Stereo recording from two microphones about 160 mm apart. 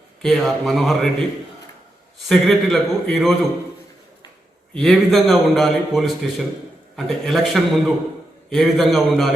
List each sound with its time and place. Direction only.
0.2 s a man's voice: centre (ahead or behind)
2.2 s a man's voice: centre (ahead or behind)
4.7 s a man's voice: centre (ahead or behind)